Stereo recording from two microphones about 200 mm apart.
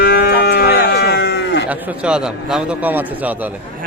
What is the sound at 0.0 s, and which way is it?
Livestock, 50° left (ahead or behind).